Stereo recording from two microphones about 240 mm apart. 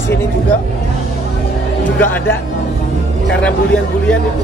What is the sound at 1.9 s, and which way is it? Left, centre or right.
Speech, centre.